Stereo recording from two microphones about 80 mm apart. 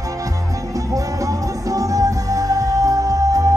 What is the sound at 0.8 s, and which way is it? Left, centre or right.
Music, right.